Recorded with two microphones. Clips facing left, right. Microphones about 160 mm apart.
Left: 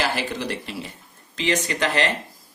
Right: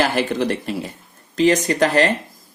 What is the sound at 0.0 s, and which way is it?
Speech, 50° right (ahead or behind).